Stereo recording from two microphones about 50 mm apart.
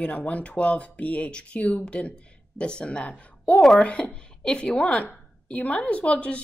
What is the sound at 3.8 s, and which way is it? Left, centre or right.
Speech, left.